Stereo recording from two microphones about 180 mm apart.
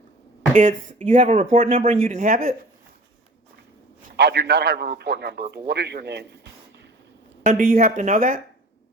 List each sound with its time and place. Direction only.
0.5 s speech: 45° right (ahead or behind)
2.2 s speech: 50° right (ahead or behind)
4.2 s a man's voice: 70° right (ahead or behind)
7.4 s speech: 50° right (ahead or behind)